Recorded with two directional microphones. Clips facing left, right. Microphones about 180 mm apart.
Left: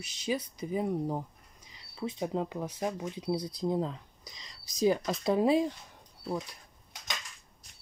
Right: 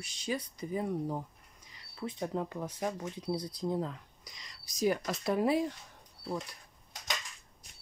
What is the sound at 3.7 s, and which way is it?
Speech, 25° left (ahead or behind).